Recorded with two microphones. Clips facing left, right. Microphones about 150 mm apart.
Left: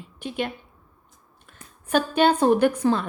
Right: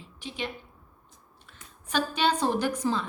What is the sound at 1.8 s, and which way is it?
A woman's voice, 55° left (ahead or behind).